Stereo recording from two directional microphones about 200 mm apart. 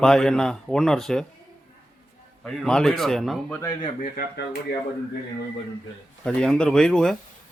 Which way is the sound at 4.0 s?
50° left (ahead or behind).